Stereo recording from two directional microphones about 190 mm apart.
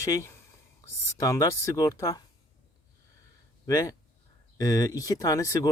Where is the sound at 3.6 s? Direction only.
15° left (ahead or behind).